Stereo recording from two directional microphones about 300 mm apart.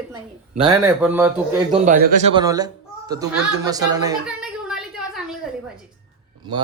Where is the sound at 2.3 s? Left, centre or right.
Centre.